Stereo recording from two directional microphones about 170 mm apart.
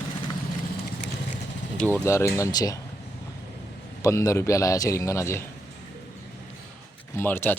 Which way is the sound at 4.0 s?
20° left (ahead or behind).